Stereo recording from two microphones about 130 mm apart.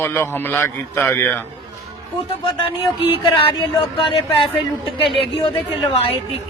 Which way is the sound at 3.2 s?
45° left (ahead or behind).